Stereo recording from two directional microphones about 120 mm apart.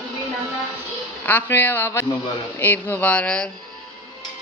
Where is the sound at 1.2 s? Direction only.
15° left (ahead or behind).